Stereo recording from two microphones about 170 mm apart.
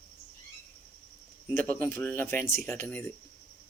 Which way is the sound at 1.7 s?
15° left (ahead or behind).